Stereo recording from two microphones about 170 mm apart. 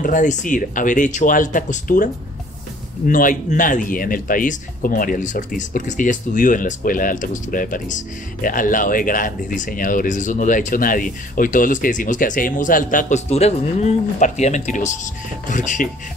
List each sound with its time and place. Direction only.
0.0 s a man's voice: 50° left (ahead or behind)
3.1 s a man's voice: 50° left (ahead or behind)